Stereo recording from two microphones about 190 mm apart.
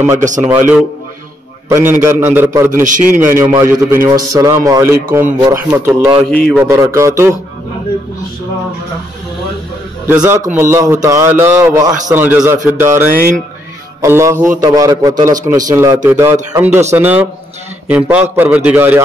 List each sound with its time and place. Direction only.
0.4 s a man's voice: 10° right (ahead or behind)
1.9 s a man's voice: 10° right (ahead or behind)
2.7 s a man's voice: 45° right (ahead or behind)
3.4 s a man's voice: 15° right (ahead or behind)
10.0 s a man's voice: 10° right (ahead or behind)